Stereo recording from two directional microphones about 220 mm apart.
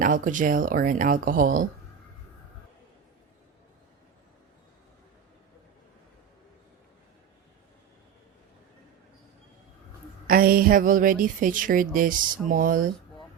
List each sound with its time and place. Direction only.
0.0 s a woman's voice: 35° right (ahead or behind)
10.2 s a woman's voice: 40° right (ahead or behind)